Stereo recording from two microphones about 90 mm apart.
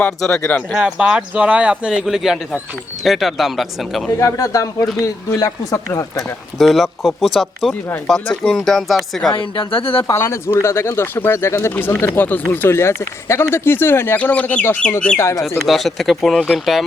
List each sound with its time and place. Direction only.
0.2 s speech: 5° left (ahead or behind)
0.8 s speech: 10° right (ahead or behind)
4.2 s speech: 35° left (ahead or behind)
6.6 s speech: centre (ahead or behind)
9.3 s speech: 75° left (ahead or behind)
10.0 s speech: 30° left (ahead or behind)
14.2 s speech: 15° left (ahead or behind)
15.4 s speech: centre (ahead or behind)